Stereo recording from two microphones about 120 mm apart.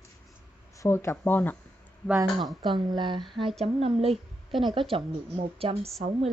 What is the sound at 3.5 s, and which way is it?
Speech, 55° right (ahead or behind).